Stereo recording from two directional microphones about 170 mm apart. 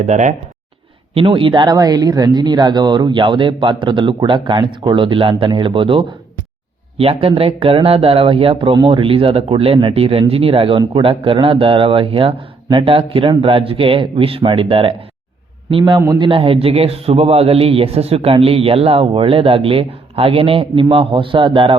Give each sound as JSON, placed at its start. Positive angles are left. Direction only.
{"t": 0.0, "sound": "speech", "side_deg": -45}
{"t": 1.1, "sound": "a man's voice", "side_deg": -30}